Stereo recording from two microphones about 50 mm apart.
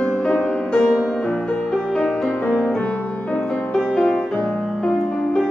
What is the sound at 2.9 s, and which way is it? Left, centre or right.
Music, left.